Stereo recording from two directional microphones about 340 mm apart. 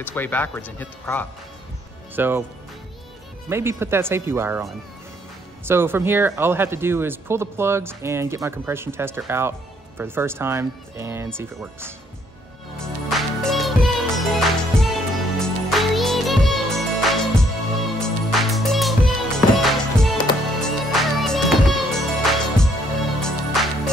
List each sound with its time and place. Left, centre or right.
0.0 s speech: centre
2.1 s speech: centre
3.4 s speech: centre
12.7 s music: centre